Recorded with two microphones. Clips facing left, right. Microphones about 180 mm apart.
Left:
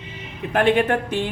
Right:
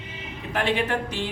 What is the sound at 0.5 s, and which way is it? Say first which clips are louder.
Speech: left 7 dB; 50° left (ahead or behind).